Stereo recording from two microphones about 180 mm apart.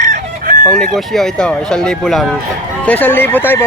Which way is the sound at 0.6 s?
5° left (ahead or behind).